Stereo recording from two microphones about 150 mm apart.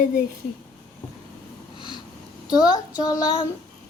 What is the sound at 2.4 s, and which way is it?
Speech, 25° left (ahead or behind).